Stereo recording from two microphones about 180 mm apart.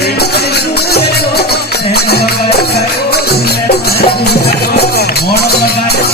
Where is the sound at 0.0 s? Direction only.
65° left (ahead or behind).